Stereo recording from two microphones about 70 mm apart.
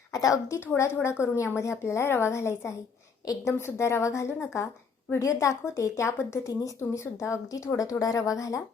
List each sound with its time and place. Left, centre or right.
0.1 s a woman's voice: left
0.8 s a woman's voice: left